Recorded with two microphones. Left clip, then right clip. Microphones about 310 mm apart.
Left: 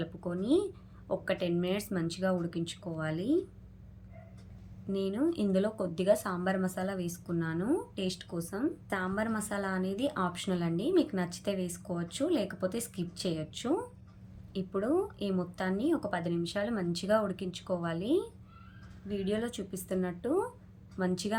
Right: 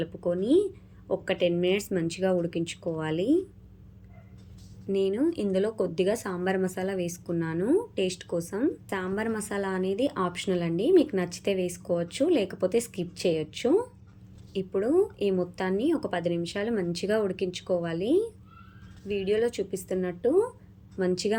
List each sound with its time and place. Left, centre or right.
0.0 s speech: centre
4.9 s speech: centre